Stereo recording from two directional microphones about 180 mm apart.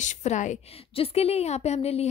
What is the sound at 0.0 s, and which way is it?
A woman's voice, 40° left (ahead or behind).